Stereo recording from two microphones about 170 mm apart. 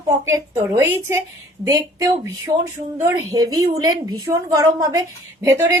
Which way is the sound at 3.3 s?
20° right (ahead or behind).